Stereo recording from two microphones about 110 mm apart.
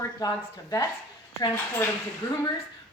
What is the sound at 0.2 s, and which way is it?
Speech, 35° left (ahead or behind).